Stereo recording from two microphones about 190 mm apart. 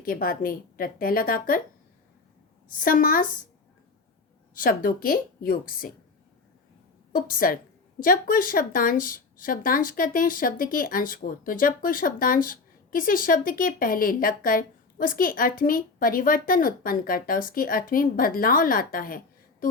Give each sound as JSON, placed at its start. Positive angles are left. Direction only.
{"t": 0.0, "sound": "a woman's voice", "side_deg": 50}
{"t": 2.7, "sound": "a woman's voice", "side_deg": 45}
{"t": 4.5, "sound": "a woman's voice", "side_deg": 50}
{"t": 7.1, "sound": "a woman's voice", "side_deg": 50}